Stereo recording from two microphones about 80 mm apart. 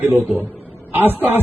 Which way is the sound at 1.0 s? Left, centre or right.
Right.